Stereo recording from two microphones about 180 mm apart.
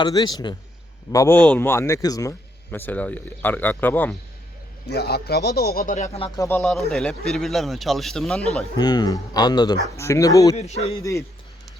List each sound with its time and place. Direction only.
0.0 s a man's voice: 20° left (ahead or behind)
2.7 s a man's voice: 10° left (ahead or behind)
4.9 s a man's voice: 65° left (ahead or behind); by 6.1 s 45° left (ahead or behind)
6.1 s speech: 30° left (ahead or behind)
6.4 s speech: 10° left (ahead or behind)
8.8 s speech: 20° left (ahead or behind)
10.6 s speech: 40° left (ahead or behind)